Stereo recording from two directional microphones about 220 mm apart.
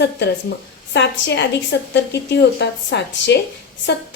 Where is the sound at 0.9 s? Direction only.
50° left (ahead or behind).